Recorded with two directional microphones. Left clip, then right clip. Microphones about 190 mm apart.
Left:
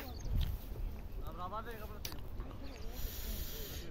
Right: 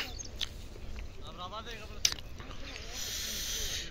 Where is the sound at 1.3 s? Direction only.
40° left (ahead or behind).